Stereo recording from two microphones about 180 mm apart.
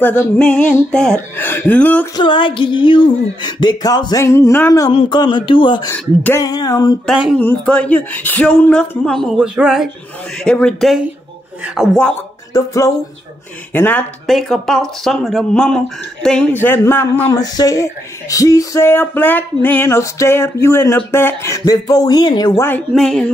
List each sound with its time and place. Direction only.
0.0 s speech: 10° left (ahead or behind)
2.1 s a sound: 30° left (ahead or behind)
5.9 s speech: 10° left (ahead or behind)
6.4 s a sound: 20° left (ahead or behind)
7.1 s speech: 5° right (ahead or behind)
7.3 s speech: 10° left (ahead or behind)
12.5 s speech: 15° left (ahead or behind)
20.6 s a sound: 15° left (ahead or behind)
22.9 s speech: 5° left (ahead or behind)